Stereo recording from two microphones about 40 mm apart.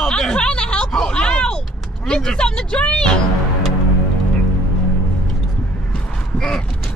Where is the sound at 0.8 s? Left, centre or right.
Centre.